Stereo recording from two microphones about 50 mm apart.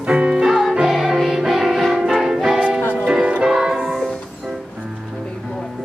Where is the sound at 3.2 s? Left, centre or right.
Centre.